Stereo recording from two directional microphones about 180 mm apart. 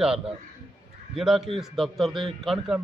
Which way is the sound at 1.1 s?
Centre (ahead or behind).